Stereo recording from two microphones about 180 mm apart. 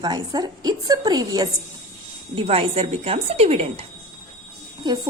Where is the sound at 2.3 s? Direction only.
30° right (ahead or behind).